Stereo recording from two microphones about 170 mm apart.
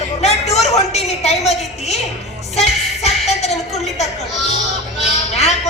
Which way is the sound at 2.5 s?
40° left (ahead or behind).